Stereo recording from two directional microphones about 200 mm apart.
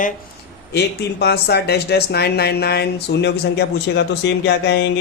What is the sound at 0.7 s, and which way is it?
Speech, 55° left (ahead or behind).